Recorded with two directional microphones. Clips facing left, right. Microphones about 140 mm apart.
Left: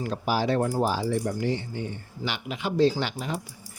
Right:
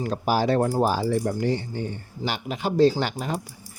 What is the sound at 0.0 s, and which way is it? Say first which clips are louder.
Speech: right 3 dB; 45° right (ahead or behind).